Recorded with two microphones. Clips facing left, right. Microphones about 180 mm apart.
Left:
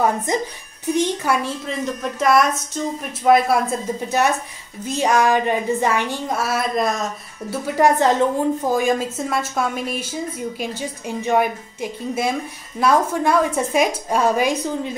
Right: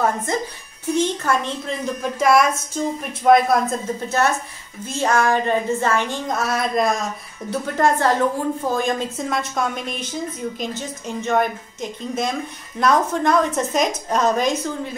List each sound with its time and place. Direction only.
0.3 s a woman's voice: 15° left (ahead or behind); by 7.1 s centre (ahead or behind)
7.6 s a woman's voice: 10° left (ahead or behind)